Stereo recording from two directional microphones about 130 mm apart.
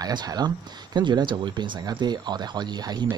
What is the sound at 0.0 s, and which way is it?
Speech, 30° right (ahead or behind).